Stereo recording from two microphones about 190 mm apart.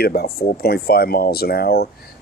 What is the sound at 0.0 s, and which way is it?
Speech, 55° left (ahead or behind).